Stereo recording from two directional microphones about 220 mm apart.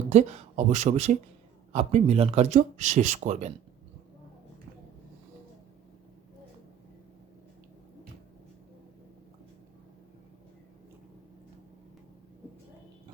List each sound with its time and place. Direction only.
0.1 s speech: 30° right (ahead or behind)